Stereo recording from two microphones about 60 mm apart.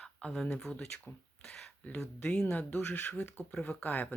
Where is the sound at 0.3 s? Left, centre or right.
Centre.